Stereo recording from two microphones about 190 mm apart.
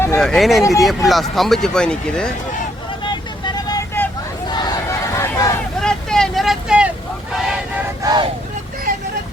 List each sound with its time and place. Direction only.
0.2 s speech: centre (ahead or behind)
3.0 s vehicle: 25° left (ahead or behind)
4.4 s crowd: 20° left (ahead or behind)
5.8 s vehicle: 5° left (ahead or behind)
8.0 s vehicle: 20° right (ahead or behind)